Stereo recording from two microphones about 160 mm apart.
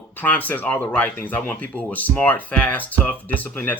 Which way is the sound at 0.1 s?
10° left (ahead or behind).